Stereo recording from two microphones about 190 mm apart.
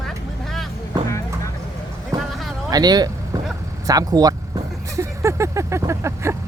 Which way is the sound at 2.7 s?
20° right (ahead or behind).